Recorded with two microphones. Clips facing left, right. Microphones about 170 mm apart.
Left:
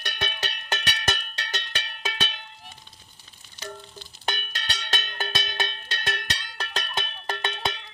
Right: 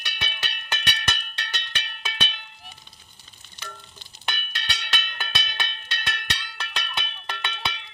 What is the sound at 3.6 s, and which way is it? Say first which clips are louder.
Music: left 5 dB; 40° left (ahead or behind).